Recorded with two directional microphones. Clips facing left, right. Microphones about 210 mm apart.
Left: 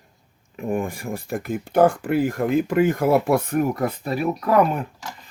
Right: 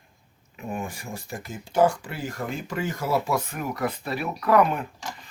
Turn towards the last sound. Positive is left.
turn(degrees=40)  # may be behind; listen again after turning